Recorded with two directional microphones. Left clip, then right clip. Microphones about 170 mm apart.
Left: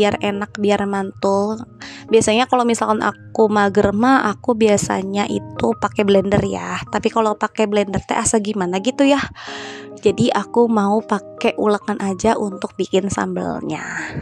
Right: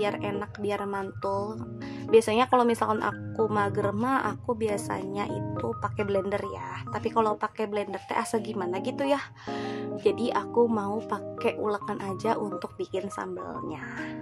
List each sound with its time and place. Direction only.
0.0 s a woman's voice: 45° left (ahead or behind)